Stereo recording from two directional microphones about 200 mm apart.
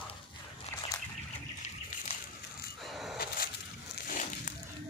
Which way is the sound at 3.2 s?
50° left (ahead or behind).